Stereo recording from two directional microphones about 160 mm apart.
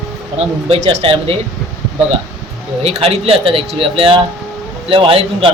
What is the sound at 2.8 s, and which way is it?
Speech, 40° right (ahead or behind).